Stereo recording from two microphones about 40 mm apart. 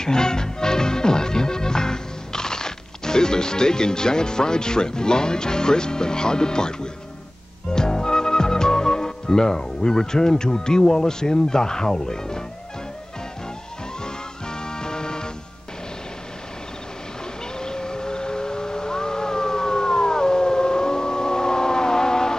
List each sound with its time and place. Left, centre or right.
0.0 s music: centre
7.7 s speech: centre
14.0 s music: centre
17.6 s siren: centre